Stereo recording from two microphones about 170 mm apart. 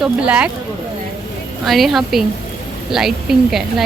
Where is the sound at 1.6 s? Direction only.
Centre (ahead or behind).